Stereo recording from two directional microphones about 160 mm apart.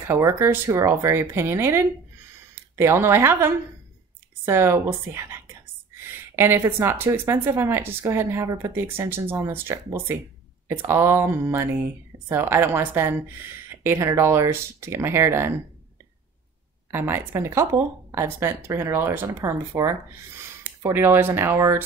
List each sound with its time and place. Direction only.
0.1 s speech: 15° right (ahead or behind)
16.9 s speech: 15° right (ahead or behind)